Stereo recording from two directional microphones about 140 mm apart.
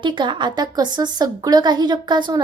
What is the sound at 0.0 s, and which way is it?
A woman's voice, 35° right (ahead or behind).